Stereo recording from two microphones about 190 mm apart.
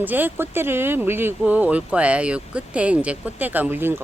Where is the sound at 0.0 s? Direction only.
10° right (ahead or behind).